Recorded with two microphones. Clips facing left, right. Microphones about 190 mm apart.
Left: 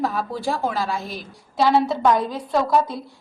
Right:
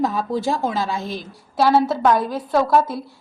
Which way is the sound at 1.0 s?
Centre (ahead or behind).